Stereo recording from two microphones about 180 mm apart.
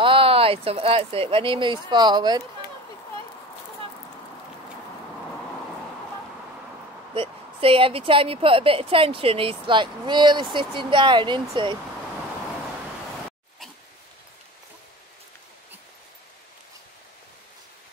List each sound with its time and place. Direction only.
0.0 s speech: 30° right (ahead or behind)
7.2 s speech: 30° right (ahead or behind)